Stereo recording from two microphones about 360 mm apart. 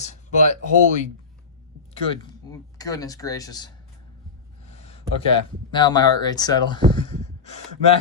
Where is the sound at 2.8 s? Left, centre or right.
Centre.